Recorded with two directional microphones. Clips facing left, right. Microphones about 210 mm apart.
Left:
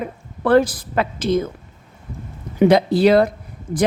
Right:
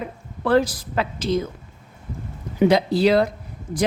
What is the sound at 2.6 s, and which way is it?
Speech, 55° left (ahead or behind).